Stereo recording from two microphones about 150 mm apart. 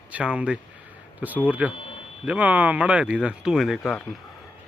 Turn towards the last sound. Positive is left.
turn(degrees=0)  # may be behind; listen again after turning